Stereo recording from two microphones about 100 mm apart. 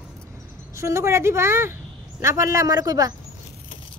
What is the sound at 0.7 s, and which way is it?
A woman's voice, 30° right (ahead or behind).